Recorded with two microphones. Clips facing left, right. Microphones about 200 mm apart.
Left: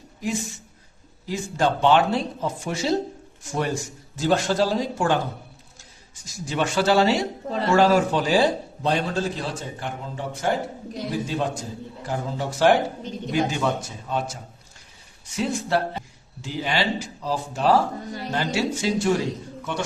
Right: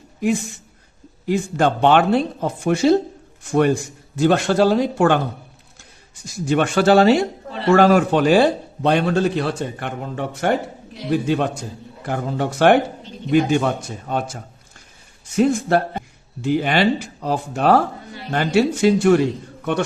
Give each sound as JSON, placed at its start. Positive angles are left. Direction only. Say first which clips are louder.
{"t": 1.3, "sound": "a man's voice", "louder": "right 5 dB", "side_deg": -60}
{"t": 6.2, "sound": "a man's voice", "louder": "right 7 dB", "side_deg": -60}
{"t": 15.4, "sound": "a man's voice", "louder": "right 7 dB", "side_deg": -50}